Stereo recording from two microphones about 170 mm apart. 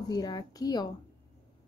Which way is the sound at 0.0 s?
25° left (ahead or behind).